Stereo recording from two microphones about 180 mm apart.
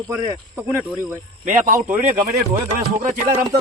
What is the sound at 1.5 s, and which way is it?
Speech, 45° right (ahead or behind).